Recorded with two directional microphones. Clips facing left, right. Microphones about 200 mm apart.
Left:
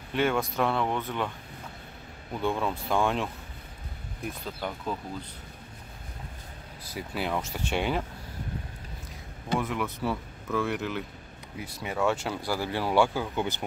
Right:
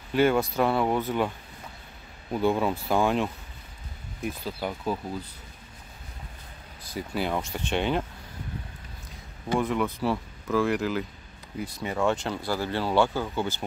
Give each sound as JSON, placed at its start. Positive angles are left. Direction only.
{"t": 0.1, "sound": "speech", "side_deg": 0}
{"t": 2.4, "sound": "speech", "side_deg": -5}
{"t": 6.8, "sound": "speech", "side_deg": 5}
{"t": 9.6, "sound": "speech", "side_deg": 5}